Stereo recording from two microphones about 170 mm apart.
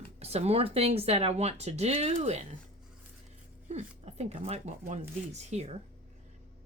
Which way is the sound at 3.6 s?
40° right (ahead or behind).